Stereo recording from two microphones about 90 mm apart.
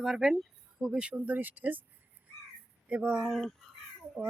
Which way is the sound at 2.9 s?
15° right (ahead or behind).